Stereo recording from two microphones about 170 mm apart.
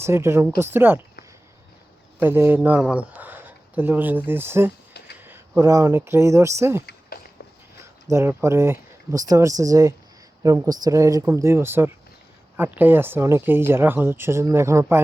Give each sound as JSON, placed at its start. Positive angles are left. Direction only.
{"t": 0.0, "sound": "speech", "side_deg": -15}
{"t": 2.2, "sound": "speech", "side_deg": -10}
{"t": 8.0, "sound": "speech", "side_deg": -15}